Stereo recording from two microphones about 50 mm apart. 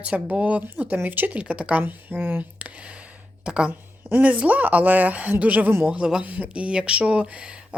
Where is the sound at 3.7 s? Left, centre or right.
Right.